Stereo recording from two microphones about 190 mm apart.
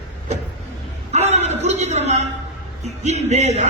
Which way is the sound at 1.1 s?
35° right (ahead or behind).